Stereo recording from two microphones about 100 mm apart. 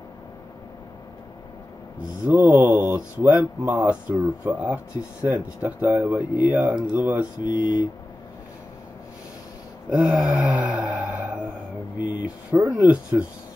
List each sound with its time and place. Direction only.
2.0 s speech: 15° right (ahead or behind)
7.4 s speech: 45° left (ahead or behind)
9.8 s wail: 10° right (ahead or behind)
12.0 s a sound: 15° right (ahead or behind)
12.5 s speech: 5° right (ahead or behind)